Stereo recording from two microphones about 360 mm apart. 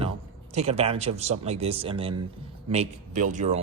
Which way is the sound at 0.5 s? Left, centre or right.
Centre.